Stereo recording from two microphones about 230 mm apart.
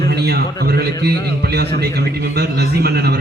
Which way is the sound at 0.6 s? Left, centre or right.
Right.